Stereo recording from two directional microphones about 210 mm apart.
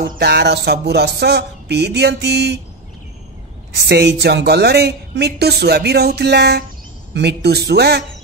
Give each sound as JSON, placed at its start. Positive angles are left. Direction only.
{"t": 0.0, "sound": "speech", "side_deg": -50}
{"t": 3.8, "sound": "speech", "side_deg": -55}